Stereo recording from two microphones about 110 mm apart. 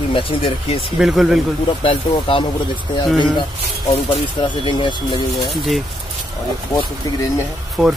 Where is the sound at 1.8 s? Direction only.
50° left (ahead or behind).